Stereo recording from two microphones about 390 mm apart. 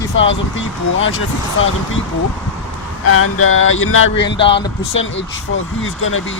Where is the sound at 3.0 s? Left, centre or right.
Left.